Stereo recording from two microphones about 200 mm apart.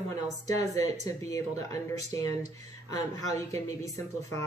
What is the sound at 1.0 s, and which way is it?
Speech, 15° left (ahead or behind).